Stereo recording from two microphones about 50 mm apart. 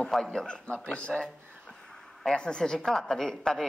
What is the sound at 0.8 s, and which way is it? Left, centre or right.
Speech, left.